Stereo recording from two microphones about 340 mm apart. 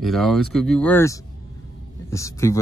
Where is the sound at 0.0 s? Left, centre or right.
Centre.